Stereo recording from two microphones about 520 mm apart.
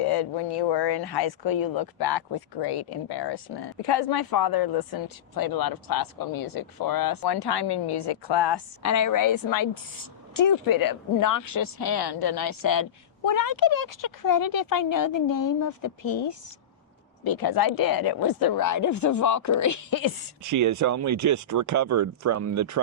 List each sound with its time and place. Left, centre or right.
0.0 s speech: left
8.8 s speech: left
20.4 s speech: right